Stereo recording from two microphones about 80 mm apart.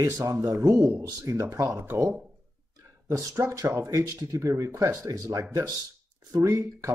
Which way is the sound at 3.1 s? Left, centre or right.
Right.